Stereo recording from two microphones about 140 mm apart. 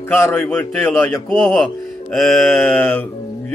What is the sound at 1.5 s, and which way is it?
Speech, 5° left (ahead or behind).